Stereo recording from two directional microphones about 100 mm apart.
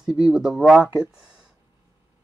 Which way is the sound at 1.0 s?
5° right (ahead or behind).